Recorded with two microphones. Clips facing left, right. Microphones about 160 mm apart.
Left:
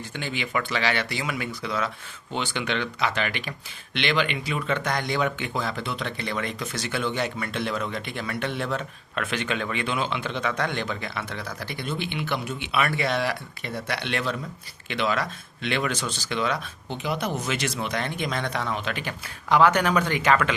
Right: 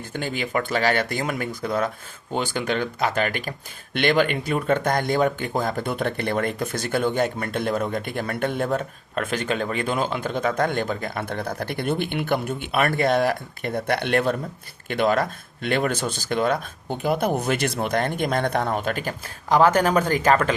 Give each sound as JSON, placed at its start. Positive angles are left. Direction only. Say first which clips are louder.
{"t": 0.1, "sound": "speech", "louder": "right 4 dB", "side_deg": -45}